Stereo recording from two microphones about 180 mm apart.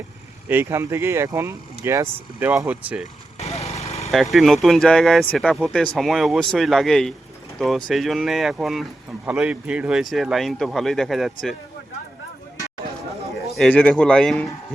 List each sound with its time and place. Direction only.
0.4 s speech: 10° right (ahead or behind)
3.3 s lawn mower: 35° left (ahead or behind)
3.7 s vehicle: 35° left (ahead or behind)
4.1 s speech: centre (ahead or behind)
13.4 s a sound: centre (ahead or behind)
14.0 s speech: 5° left (ahead or behind)